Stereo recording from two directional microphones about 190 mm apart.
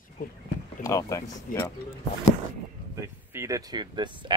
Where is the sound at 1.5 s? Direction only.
45° left (ahead or behind).